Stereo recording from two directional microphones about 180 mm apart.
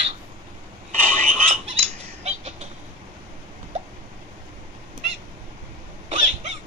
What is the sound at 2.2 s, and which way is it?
Chicken, 40° right (ahead or behind).